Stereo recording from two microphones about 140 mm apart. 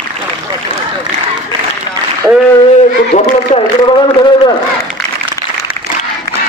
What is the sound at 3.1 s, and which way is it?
Speech, 55° left (ahead or behind).